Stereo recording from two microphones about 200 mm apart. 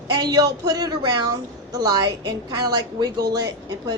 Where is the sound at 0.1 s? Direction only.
20° right (ahead or behind).